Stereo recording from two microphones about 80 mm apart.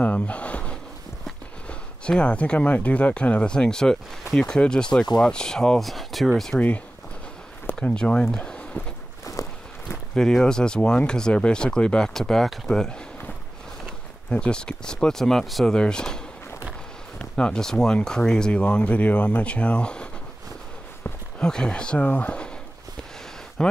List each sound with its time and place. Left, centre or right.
0.0 s gasp: centre
1.7 s speech: centre
7.9 s speech: centre
9.2 s walk: left
9.8 s speech: centre
17.2 s speech: centre
21.4 s speech: centre
23.6 s speech: centre